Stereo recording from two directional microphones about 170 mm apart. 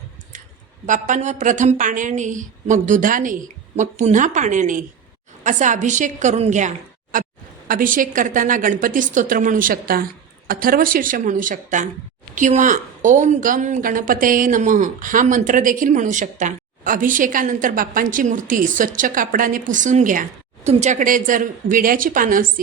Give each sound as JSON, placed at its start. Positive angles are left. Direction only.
{"t": 0.9, "sound": "a woman's voice", "side_deg": -45}